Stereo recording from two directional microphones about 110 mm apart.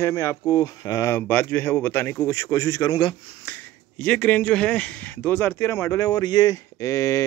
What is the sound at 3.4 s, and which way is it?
Speech, 15° left (ahead or behind).